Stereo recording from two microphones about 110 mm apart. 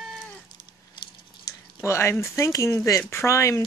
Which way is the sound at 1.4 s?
25° left (ahead or behind).